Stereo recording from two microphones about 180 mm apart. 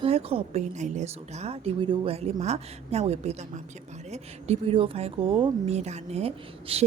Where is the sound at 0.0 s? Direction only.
35° right (ahead or behind).